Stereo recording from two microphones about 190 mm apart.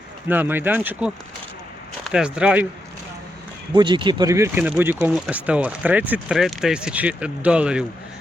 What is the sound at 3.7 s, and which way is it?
Speech, 25° right (ahead or behind).